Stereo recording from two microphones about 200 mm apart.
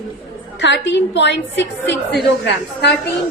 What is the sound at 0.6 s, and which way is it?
A woman's voice, 60° left (ahead or behind).